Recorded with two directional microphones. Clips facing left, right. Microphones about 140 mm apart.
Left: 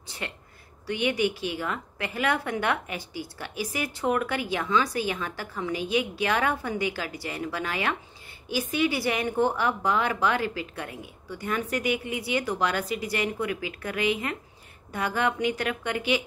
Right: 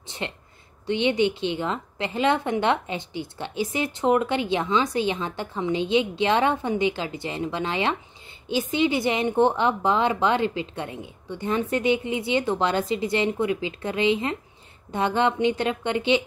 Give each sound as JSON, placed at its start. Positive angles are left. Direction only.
{"t": 0.2, "sound": "a woman's voice", "side_deg": -25}